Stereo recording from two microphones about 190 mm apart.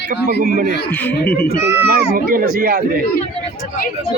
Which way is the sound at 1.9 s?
50° right (ahead or behind).